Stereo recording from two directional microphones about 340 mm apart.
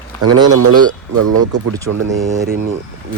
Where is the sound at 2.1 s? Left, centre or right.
Centre.